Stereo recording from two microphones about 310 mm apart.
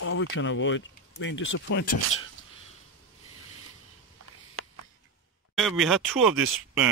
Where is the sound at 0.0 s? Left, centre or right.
Left.